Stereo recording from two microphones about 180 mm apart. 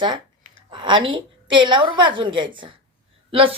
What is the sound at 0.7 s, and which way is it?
Speech, 25° right (ahead or behind).